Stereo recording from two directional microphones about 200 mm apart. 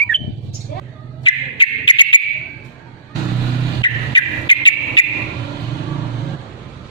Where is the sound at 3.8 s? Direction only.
20° left (ahead or behind).